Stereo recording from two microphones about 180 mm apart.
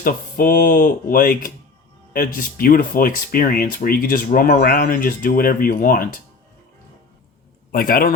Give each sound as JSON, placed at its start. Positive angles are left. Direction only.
{"t": 0.0, "sound": "speech", "side_deg": 55}
{"t": 7.7, "sound": "speech", "side_deg": 55}